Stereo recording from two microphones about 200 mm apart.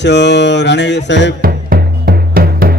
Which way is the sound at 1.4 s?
50° right (ahead or behind).